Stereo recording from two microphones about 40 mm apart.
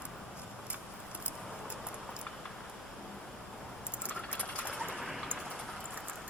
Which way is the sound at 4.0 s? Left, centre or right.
Left.